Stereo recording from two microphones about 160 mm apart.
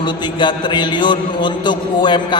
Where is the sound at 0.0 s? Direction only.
30° left (ahead or behind).